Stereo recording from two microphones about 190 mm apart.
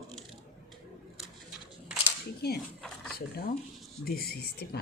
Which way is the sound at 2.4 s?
60° left (ahead or behind).